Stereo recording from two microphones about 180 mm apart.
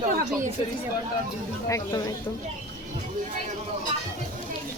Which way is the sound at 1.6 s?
20° left (ahead or behind).